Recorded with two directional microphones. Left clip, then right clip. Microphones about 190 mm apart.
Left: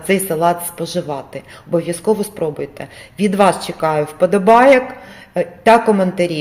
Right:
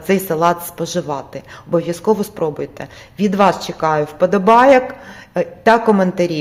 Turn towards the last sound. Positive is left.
turn(degrees=-10)  # may be behind; listen again after turning